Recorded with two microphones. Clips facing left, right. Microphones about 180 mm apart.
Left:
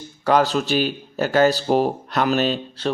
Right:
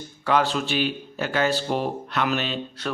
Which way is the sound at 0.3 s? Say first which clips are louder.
Left 4 dB; 40° left (ahead or behind).